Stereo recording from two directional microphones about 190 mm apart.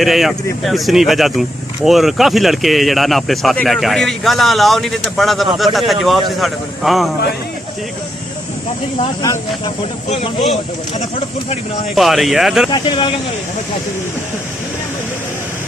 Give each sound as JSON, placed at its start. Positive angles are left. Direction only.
{"t": 0.0, "sound": "speech", "side_deg": 0}
{"t": 11.9, "sound": "speech", "side_deg": 0}
{"t": 12.7, "sound": "speech", "side_deg": 25}